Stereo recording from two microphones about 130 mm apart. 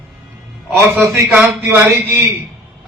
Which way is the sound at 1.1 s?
15° right (ahead or behind).